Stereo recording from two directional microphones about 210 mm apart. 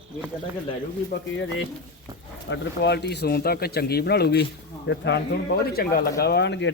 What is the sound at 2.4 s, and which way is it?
Speech, 60° left (ahead or behind).